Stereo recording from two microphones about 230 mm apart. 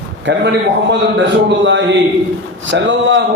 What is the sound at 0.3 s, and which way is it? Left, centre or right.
A man's voice, right.